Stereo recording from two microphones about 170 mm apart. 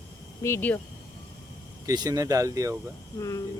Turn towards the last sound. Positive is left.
turn(degrees=20)  # may be behind; listen again after turning